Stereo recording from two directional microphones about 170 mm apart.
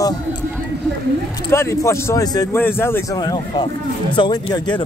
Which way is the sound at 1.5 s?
15° left (ahead or behind).